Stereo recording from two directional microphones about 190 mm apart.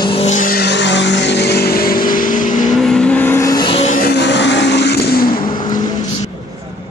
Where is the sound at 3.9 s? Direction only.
55° left (ahead or behind).